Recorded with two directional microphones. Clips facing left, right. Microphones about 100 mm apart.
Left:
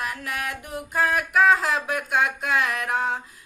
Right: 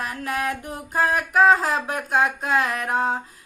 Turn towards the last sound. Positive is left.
turn(degrees=-35)  # may be behind; listen again after turning